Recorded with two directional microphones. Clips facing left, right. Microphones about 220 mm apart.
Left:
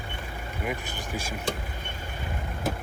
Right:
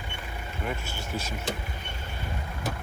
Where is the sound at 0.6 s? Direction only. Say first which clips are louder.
Left 1 dB; 15° left (ahead or behind).